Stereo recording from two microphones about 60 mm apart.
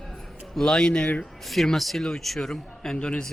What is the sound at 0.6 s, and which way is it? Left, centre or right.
Speech, centre.